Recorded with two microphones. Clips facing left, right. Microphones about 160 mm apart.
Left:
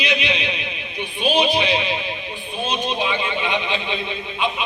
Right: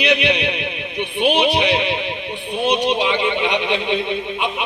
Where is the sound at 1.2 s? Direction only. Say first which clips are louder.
Right 2 dB; 65° right (ahead or behind).